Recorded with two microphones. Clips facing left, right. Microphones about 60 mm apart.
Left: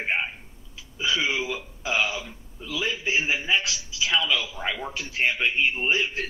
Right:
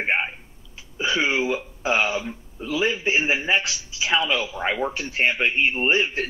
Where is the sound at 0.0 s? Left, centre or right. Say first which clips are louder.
Right 3 dB; right.